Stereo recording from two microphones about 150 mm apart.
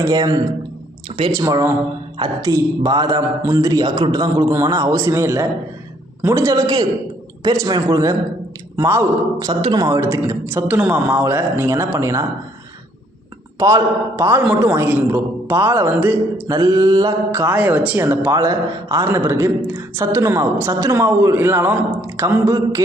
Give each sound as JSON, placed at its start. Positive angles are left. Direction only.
{"t": 0.0, "sound": "a man's voice", "side_deg": -25}
{"t": 9.5, "sound": "speech", "side_deg": -30}
{"t": 13.6, "sound": "a man's voice", "side_deg": -20}
{"t": 16.6, "sound": "a man's voice", "side_deg": -25}
{"t": 17.4, "sound": "speech", "side_deg": -10}